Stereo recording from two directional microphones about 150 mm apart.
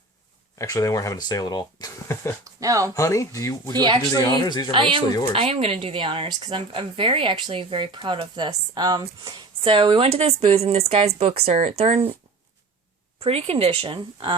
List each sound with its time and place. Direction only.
0.6 s speech: 20° left (ahead or behind)
2.4 s speech: 20° right (ahead or behind)
2.9 s speech: 20° left (ahead or behind)
3.8 s speech: 30° right (ahead or behind)
4.1 s speech: 25° left (ahead or behind)
4.7 s speech: 35° right (ahead or behind)
13.2 s speech: 40° right (ahead or behind)